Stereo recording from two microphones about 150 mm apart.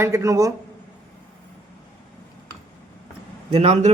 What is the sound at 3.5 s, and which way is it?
Speech, 45° right (ahead or behind).